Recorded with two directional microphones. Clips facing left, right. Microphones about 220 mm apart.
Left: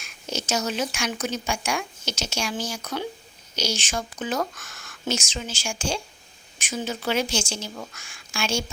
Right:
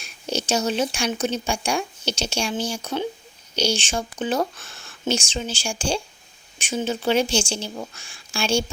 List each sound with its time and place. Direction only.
0.0 s a woman's voice: 30° right (ahead or behind)